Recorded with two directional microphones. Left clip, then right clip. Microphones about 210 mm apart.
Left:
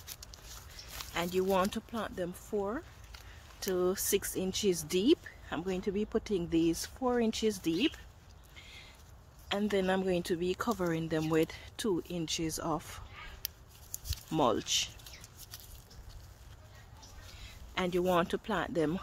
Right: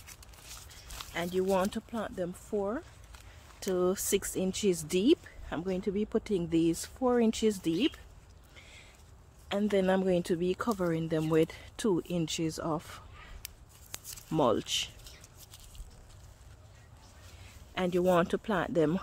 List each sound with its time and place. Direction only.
0.0 s a sound: 20° right (ahead or behind)
0.9 s speech: 10° right (ahead or behind)
8.5 s a sound: 25° right (ahead or behind)
9.5 s speech: 20° right (ahead or behind)
13.4 s shuffling cards: centre (ahead or behind)
14.3 s speech: 15° right (ahead or behind)
17.7 s speech: 20° right (ahead or behind)